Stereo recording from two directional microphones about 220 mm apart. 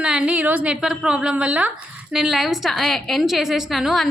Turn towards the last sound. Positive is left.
turn(degrees=0)  # may be behind; listen again after turning